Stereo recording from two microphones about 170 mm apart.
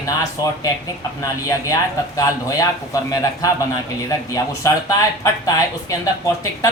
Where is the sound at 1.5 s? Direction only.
20° left (ahead or behind).